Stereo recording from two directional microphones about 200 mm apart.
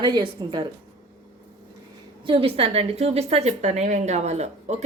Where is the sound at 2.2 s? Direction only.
25° right (ahead or behind).